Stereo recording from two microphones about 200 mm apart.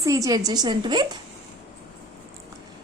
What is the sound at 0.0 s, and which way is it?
A woman's voice, 15° right (ahead or behind).